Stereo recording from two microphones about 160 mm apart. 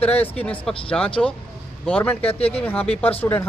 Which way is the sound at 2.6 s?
10° left (ahead or behind).